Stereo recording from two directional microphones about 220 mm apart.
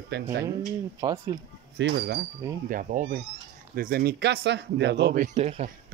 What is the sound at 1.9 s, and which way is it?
Speech, 50° right (ahead or behind).